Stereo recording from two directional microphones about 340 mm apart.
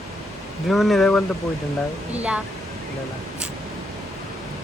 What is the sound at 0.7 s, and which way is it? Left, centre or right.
Speech, centre.